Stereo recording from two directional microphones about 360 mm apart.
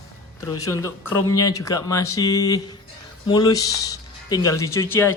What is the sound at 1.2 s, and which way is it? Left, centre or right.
Speech, left.